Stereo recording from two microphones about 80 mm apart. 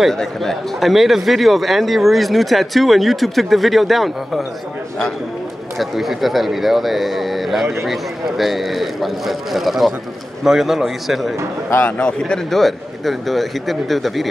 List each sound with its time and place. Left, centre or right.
0.0 s speech: centre
5.8 s speech: centre
11.8 s speech: centre